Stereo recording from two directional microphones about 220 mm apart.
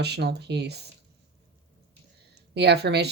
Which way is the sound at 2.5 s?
50° right (ahead or behind).